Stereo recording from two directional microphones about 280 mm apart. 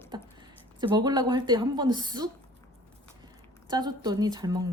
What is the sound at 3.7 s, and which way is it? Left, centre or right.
Speech, centre.